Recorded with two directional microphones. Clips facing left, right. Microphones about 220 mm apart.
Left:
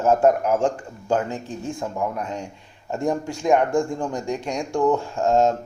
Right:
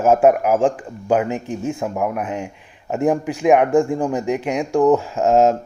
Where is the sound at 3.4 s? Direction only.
80° right.